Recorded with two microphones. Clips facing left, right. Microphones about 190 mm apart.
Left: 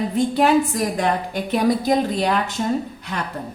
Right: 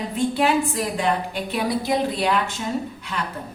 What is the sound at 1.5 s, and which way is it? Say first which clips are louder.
A woman's voice: left 5 dB; 45° left (ahead or behind).